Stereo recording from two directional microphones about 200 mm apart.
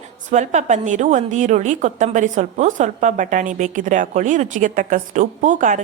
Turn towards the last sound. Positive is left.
turn(degrees=-40)  # may be behind; listen again after turning